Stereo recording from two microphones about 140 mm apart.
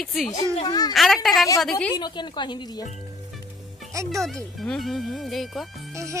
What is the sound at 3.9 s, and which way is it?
Speech, 20° right (ahead or behind).